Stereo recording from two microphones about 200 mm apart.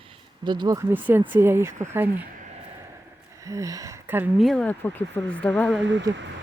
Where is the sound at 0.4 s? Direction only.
20° right (ahead or behind).